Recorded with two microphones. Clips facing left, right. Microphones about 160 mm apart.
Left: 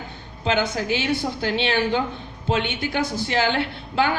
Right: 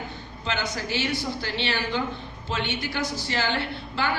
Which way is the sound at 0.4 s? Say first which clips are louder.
Left 7 dB; 50° left (ahead or behind).